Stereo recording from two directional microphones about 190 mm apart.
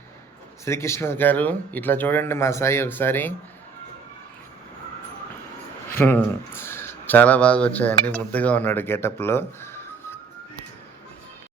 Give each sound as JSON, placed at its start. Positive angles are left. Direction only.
{"t": 0.6, "sound": "speech", "side_deg": 15}
{"t": 5.9, "sound": "speech", "side_deg": 10}